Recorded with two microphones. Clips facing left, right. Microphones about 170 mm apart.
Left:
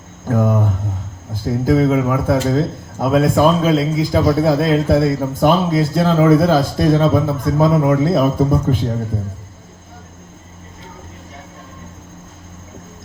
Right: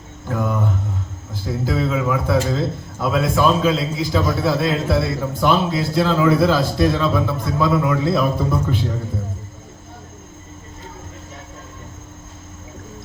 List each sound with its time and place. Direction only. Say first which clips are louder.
0.3 s mantra: left 5 dB; 45° left (ahead or behind)
1.3 s speech: left 7 dB; 50° left (ahead or behind)